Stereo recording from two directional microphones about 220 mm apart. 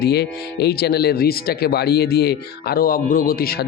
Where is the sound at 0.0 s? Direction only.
45° left (ahead or behind).